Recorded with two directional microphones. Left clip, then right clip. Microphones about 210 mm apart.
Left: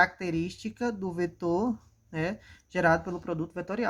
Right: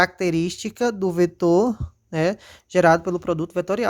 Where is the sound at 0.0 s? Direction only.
50° right (ahead or behind).